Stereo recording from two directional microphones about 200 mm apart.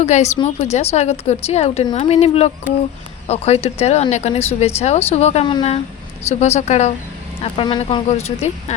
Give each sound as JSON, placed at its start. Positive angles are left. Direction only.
{"t": 0.0, "sound": "speech", "side_deg": 35}